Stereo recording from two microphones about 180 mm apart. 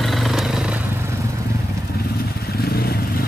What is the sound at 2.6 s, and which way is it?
Vehicle, 55° left (ahead or behind).